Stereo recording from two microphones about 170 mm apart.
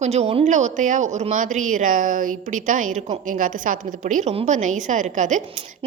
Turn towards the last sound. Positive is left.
turn(degrees=-45)  # may be behind; listen again after turning